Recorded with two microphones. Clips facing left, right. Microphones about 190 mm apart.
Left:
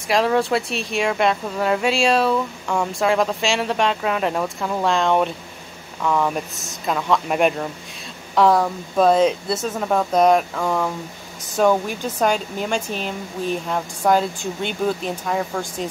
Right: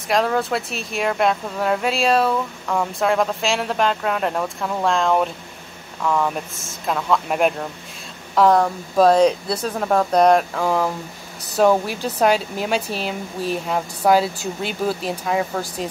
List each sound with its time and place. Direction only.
0.1 s speech: centre (ahead or behind)